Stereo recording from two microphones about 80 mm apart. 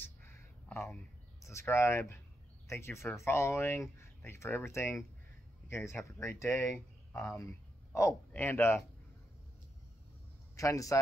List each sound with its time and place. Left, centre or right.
0.7 s bird: centre
1.4 s a man's voice: left
10.5 s a man's voice: left